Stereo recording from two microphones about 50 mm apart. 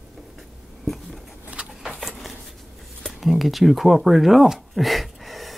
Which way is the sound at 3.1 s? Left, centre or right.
Centre.